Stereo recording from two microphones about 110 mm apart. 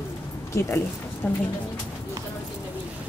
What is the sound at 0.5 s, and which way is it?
Speech, 20° left (ahead or behind).